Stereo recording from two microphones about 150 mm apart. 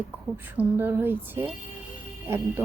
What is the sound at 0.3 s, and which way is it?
Speech, 15° right (ahead or behind).